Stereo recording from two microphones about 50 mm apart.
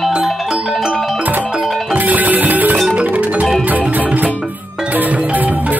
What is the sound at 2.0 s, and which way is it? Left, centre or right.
Music, right.